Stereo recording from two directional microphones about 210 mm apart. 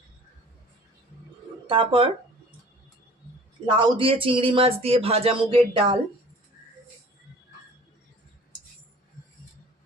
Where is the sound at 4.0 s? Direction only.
25° right (ahead or behind).